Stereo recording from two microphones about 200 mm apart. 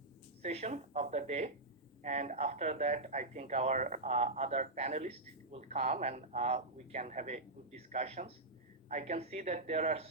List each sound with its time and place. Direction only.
0.4 s speech: 35° right (ahead or behind)